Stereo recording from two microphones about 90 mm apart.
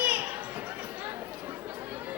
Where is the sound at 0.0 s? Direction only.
20° right (ahead or behind).